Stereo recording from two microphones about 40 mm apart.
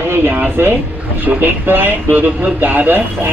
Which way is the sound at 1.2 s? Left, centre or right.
Right.